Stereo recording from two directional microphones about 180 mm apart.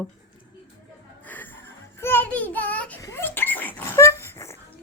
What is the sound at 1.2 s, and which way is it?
Music, 10° left (ahead or behind).